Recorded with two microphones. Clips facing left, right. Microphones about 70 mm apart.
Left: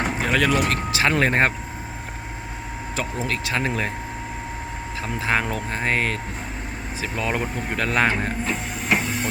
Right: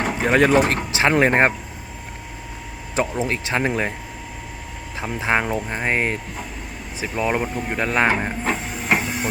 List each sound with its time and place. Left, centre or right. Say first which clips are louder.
0.2 s speech: right 6 dB; right
0.9 s speech: right 3 dB; right
2.9 s speech: right 5 dB; right
4.9 s speech: right 2 dB; right
8.5 s printer: right 1 dB; centre
9.0 s train: right 1 dB; centre